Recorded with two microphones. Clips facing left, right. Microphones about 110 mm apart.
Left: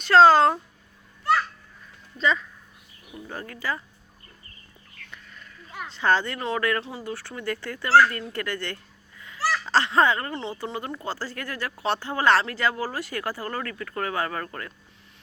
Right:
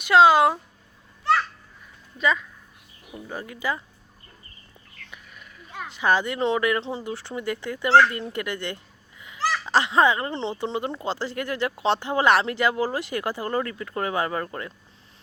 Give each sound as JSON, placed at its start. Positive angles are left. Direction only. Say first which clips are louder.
{"t": 0.0, "sound": "speech", "louder": "left 1 dB", "side_deg": -10}
{"t": 3.2, "sound": "speech", "louder": "right 2 dB", "side_deg": -10}
{"t": 5.1, "sound": "speech", "louder": "even", "side_deg": -15}